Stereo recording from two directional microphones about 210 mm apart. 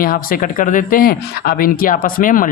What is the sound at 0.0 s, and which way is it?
Speech, 40° left (ahead or behind).